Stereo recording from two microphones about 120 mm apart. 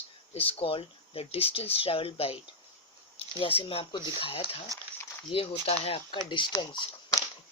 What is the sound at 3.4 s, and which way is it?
Speech, 50° left (ahead or behind).